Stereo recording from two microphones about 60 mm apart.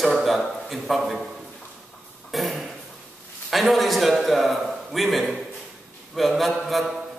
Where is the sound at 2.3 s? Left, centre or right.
Centre.